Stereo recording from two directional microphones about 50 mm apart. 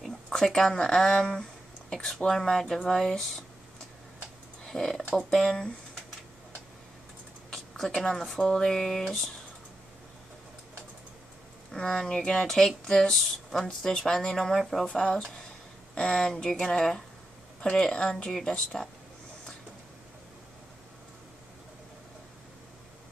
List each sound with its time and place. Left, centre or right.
0.3 s speech: centre
4.6 s speech: centre
7.5 s speech: centre
11.7 s speech: centre
13.7 s speech: centre
14.9 s speech: centre